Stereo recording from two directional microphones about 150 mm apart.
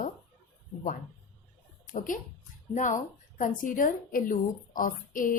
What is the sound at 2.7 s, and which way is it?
A woman's voice, 55° left (ahead or behind).